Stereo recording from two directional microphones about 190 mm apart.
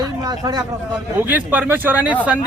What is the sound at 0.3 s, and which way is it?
Speech, 20° right (ahead or behind).